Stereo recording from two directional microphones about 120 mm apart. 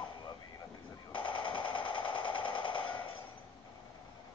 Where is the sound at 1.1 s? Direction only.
45° left (ahead or behind).